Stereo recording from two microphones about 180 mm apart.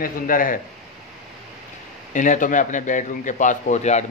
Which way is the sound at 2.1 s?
45° left (ahead or behind).